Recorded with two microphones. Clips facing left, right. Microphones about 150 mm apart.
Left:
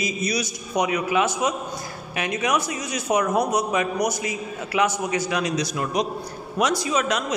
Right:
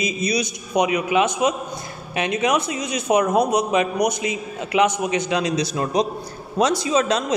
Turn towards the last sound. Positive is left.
turn(degrees=-30)  # may be behind; listen again after turning